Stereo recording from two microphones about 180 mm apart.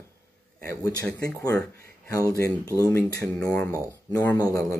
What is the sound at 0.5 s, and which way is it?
Speech, 10° left (ahead or behind).